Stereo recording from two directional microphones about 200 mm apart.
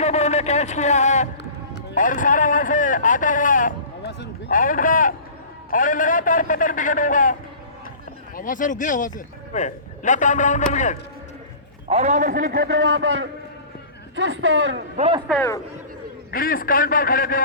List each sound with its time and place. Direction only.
0.0 s a sound: 35° left (ahead or behind)
2.0 s a man's voice: 40° left (ahead or behind)
4.0 s a man's voice: 55° left (ahead or behind)
8.4 s a man's voice: 40° left (ahead or behind)
11.9 s a man's voice: 35° right (ahead or behind); by 14.8 s 75° right (ahead or behind)
14.9 s speech: 30° right (ahead or behind)
16.3 s a man's voice: 45° left (ahead or behind)